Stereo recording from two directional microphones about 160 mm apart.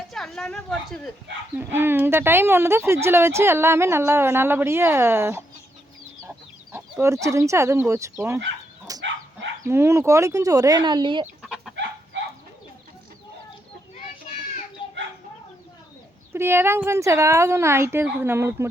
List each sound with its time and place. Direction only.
0.1 s a woman's voice: centre (ahead or behind)
1.5 s speech: 15° right (ahead or behind)
6.7 s speech: 15° right (ahead or behind)
8.9 s bow-wow: 20° right (ahead or behind)
9.6 s speech: 15° right (ahead or behind)
11.4 s chicken: centre (ahead or behind)
14.8 s bird: 30° left (ahead or behind)
16.3 s speech: 15° right (ahead or behind)